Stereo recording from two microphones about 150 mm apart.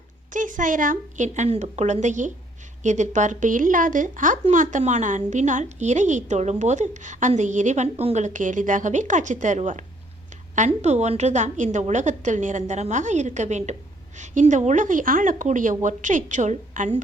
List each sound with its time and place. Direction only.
0.3 s a woman's voice: 60° right (ahead or behind)